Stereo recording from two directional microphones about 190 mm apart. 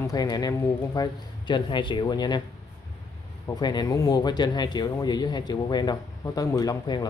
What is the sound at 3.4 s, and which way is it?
Speech, 20° left (ahead or behind).